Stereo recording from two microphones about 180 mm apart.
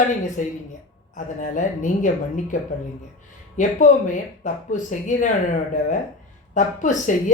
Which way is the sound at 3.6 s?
45° left (ahead or behind).